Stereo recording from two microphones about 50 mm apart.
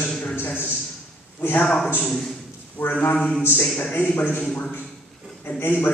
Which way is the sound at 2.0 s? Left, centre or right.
Centre.